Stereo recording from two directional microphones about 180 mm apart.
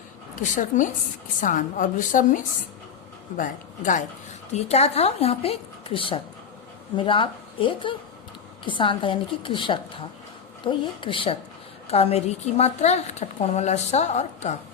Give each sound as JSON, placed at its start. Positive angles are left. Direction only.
{"t": 0.4, "sound": "a woman's voice", "side_deg": 45}